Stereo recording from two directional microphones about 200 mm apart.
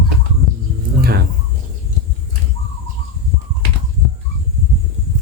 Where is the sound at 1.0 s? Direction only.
55° right (ahead or behind).